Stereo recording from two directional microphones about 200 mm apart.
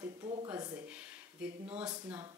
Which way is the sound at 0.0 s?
20° right (ahead or behind).